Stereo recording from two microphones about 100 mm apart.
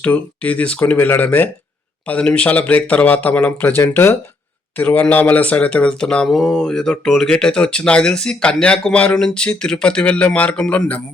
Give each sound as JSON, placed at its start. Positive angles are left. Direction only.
{"t": 0.0, "sound": "speech", "side_deg": 15}